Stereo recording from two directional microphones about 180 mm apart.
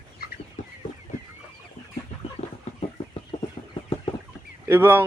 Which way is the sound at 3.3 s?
30° left (ahead or behind).